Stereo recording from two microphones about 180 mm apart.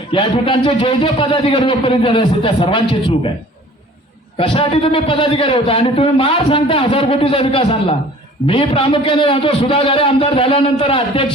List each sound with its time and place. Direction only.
0.1 s a man's voice: 30° left (ahead or behind)
4.4 s a man's voice: 30° left (ahead or behind)